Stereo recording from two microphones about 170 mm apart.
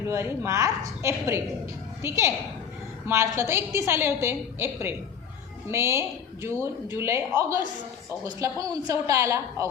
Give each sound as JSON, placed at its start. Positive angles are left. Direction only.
{"t": 0.1, "sound": "a woman's voice", "side_deg": -15}